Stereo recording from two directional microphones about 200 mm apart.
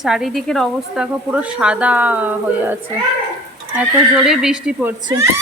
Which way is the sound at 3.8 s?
5° right (ahead or behind).